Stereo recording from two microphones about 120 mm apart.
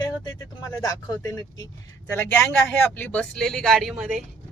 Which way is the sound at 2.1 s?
20° left (ahead or behind).